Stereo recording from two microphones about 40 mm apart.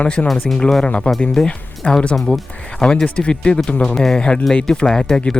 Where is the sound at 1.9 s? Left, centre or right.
Left.